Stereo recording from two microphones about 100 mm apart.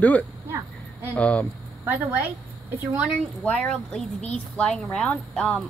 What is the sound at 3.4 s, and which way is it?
Speech, 10° left (ahead or behind).